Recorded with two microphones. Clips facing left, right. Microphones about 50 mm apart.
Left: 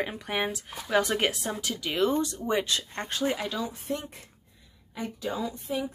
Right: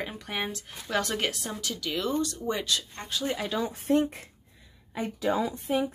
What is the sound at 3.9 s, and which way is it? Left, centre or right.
Speech, right.